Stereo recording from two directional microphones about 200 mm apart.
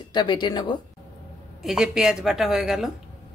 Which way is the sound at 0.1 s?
25° left (ahead or behind).